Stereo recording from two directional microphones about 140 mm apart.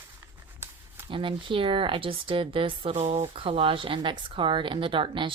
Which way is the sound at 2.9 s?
50° right (ahead or behind).